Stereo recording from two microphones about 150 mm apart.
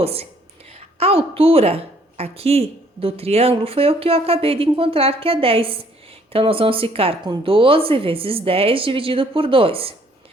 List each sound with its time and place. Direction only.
0.0 s a woman's voice: 40° right (ahead or behind)